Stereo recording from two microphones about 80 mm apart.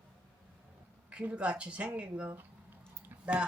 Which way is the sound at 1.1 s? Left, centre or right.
Centre.